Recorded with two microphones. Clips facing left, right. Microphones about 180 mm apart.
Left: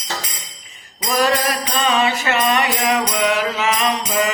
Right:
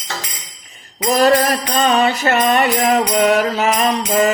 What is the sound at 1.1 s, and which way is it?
Music, 45° right (ahead or behind).